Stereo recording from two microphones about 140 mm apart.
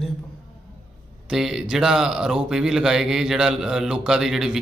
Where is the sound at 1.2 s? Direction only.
Centre (ahead or behind).